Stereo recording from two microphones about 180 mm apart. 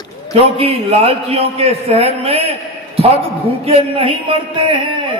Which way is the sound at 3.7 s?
30° right (ahead or behind).